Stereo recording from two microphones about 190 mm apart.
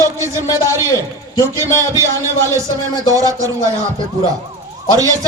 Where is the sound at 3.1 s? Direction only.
15° right (ahead or behind).